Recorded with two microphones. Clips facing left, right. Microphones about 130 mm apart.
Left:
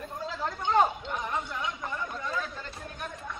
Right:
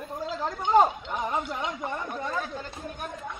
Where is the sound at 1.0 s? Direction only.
25° right (ahead or behind).